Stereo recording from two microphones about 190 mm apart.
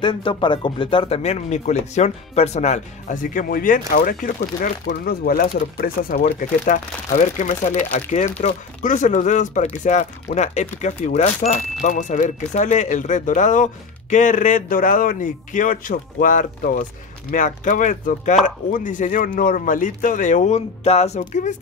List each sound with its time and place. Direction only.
0.0 s speech: 25° left (ahead or behind); by 6.2 s 50° left (ahead or behind)
6.2 s speech: 40° left (ahead or behind)